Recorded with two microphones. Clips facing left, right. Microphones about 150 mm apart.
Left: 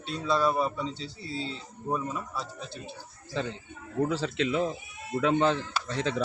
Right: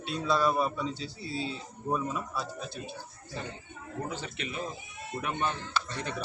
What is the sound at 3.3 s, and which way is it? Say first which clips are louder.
Speech: left 7 dB; 90° left.